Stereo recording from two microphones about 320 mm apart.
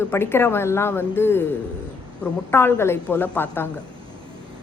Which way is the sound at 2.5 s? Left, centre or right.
Centre.